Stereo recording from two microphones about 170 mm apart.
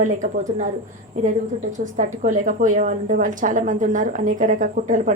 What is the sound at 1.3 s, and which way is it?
A woman's voice, 45° right (ahead or behind).